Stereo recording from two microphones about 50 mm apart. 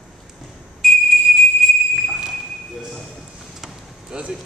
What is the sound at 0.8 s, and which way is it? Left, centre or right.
Whistle, centre.